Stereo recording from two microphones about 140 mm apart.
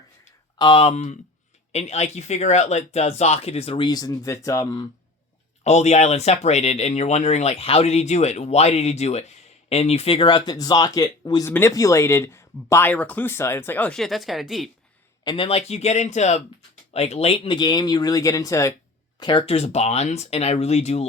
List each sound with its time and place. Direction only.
0.6 s speech: 40° left (ahead or behind)
3.8 s speech: 25° left (ahead or behind)
5.6 s speech: 50° left (ahead or behind); by 11.4 s 30° left (ahead or behind)
11.4 s speech: 20° left (ahead or behind); by 14.7 s centre (ahead or behind)
15.2 s speech: 30° left (ahead or behind)
15.4 s speech: 45° left (ahead or behind); by 18.7 s 25° left (ahead or behind)
19.2 s speech: 40° left (ahead or behind)